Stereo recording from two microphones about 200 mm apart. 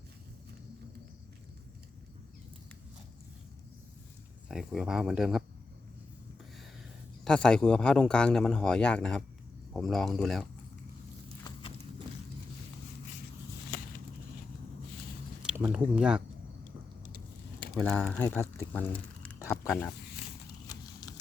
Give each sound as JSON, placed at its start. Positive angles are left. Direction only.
{"t": 4.4, "sound": "a man's voice", "side_deg": 0}
{"t": 7.3, "sound": "a man's voice", "side_deg": 5}
{"t": 15.4, "sound": "speech", "side_deg": -10}
{"t": 17.7, "sound": "speech", "side_deg": 0}
{"t": 20.7, "sound": "a sound", "side_deg": 20}